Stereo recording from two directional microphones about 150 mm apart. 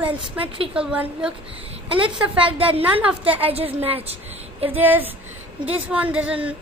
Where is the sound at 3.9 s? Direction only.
40° right (ahead or behind).